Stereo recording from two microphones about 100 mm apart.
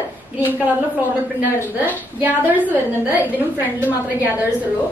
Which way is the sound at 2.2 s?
15° right (ahead or behind).